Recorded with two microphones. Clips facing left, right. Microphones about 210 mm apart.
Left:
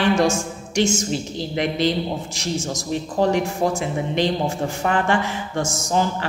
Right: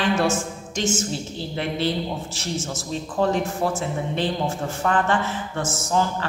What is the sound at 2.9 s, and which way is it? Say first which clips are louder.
Speech: left 3 dB; 15° left (ahead or behind).